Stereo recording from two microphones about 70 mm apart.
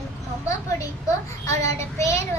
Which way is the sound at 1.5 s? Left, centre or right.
Left.